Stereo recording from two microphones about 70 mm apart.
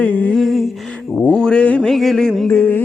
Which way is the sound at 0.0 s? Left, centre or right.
Centre.